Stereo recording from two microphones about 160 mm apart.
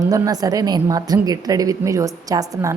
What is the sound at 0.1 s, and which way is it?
A woman's voice, 25° right (ahead or behind).